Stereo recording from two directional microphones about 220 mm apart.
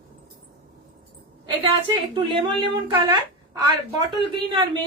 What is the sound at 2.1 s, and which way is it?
Speech, 20° right (ahead or behind).